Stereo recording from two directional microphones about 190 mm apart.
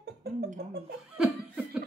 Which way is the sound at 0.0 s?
55° right (ahead or behind).